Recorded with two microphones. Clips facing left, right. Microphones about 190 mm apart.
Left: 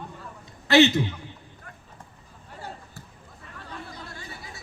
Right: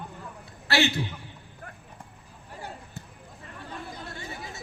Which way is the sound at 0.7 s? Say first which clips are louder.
Left 8 dB; 20° left (ahead or behind).